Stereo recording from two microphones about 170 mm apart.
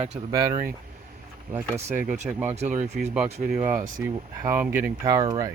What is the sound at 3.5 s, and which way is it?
Speech, 10° right (ahead or behind).